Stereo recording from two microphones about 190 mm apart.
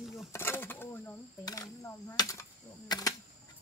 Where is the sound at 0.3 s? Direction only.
15° left (ahead or behind).